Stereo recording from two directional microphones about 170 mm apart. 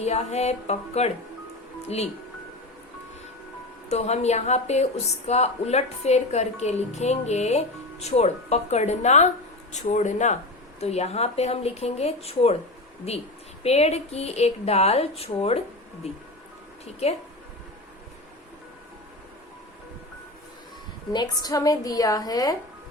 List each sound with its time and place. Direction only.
0.0 s a woman's voice: 40° left (ahead or behind)
3.8 s a woman's voice: 40° left (ahead or behind)
21.1 s a woman's voice: 25° left (ahead or behind)